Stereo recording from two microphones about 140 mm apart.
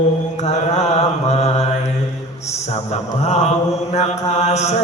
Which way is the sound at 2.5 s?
50° left (ahead or behind).